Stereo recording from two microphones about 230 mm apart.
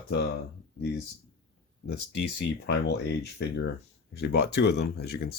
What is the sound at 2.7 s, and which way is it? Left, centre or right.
Speech, left.